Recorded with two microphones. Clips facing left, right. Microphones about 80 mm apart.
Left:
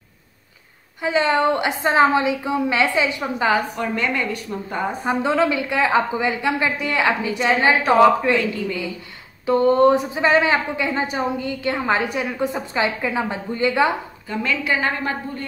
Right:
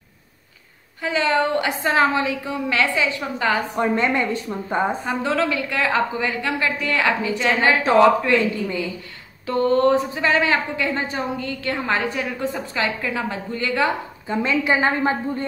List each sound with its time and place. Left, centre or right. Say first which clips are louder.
1.0 s a woman's voice: left 2 dB; left
3.7 s a woman's voice: right 3 dB; right
5.0 s a woman's voice: left 3 dB; centre
8.4 s a woman's voice: right 1 dB; right
9.5 s a woman's voice: left 3 dB; centre
14.2 s a woman's voice: right 3 dB; right